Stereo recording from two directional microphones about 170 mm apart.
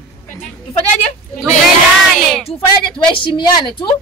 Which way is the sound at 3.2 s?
30° left (ahead or behind).